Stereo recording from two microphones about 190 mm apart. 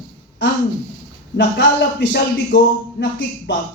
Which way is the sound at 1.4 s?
65° left (ahead or behind).